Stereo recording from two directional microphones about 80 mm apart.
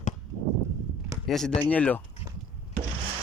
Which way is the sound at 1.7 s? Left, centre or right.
Left.